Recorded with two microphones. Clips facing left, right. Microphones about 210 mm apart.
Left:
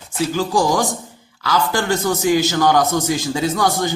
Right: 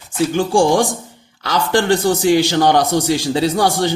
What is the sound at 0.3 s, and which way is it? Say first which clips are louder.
Speech: right 4 dB; 30° right (ahead or behind).